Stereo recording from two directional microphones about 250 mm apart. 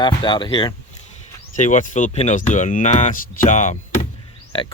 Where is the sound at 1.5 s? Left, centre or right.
Left.